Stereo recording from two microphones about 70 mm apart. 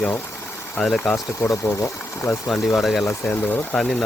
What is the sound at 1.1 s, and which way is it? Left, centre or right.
Speech, left.